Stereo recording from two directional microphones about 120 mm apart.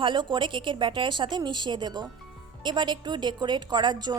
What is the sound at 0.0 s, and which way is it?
A woman's voice, 40° right (ahead or behind).